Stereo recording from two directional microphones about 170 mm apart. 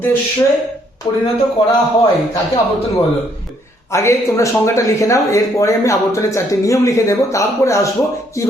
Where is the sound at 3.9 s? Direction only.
15° left (ahead or behind).